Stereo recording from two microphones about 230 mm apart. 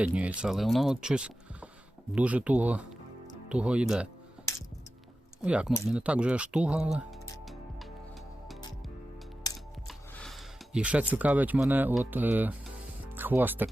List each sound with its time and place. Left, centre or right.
0.0 s speech: centre
5.4 s speech: centre
9.5 s music: centre
9.8 s speech: centre